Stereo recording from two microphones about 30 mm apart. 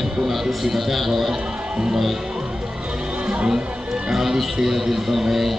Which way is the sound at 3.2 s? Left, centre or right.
Right.